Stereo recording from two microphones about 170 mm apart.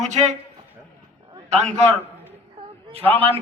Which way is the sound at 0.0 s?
40° right (ahead or behind).